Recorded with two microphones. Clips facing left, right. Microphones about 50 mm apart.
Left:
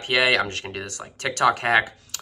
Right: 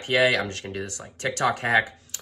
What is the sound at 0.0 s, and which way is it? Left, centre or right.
Speech, left.